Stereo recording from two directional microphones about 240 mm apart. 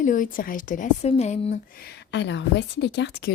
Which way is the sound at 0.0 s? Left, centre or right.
Left.